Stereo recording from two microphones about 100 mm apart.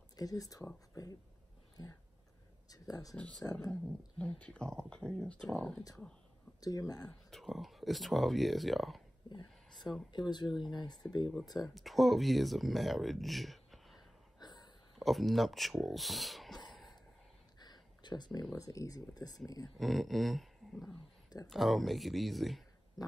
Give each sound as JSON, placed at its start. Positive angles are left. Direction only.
{"t": 0.1, "sound": "speech", "side_deg": 35}
{"t": 1.8, "sound": "speech", "side_deg": 40}
{"t": 3.2, "sound": "speech", "side_deg": 10}
{"t": 6.6, "sound": "speech", "side_deg": 35}
{"t": 7.1, "sound": "speech", "side_deg": 5}
{"t": 10.1, "sound": "speech", "side_deg": 45}
{"t": 11.6, "sound": "speech", "side_deg": 0}
{"t": 14.4, "sound": "a sound", "side_deg": 45}
{"t": 15.0, "sound": "speech", "side_deg": 0}
{"t": 17.6, "sound": "a sound", "side_deg": 45}
{"t": 18.6, "sound": "speech", "side_deg": 35}
{"t": 19.8, "sound": "speech", "side_deg": 0}